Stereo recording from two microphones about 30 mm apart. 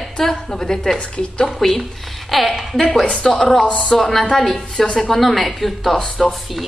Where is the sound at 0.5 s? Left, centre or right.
Centre.